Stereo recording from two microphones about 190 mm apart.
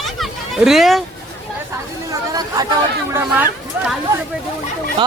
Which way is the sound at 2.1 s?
20° right (ahead or behind).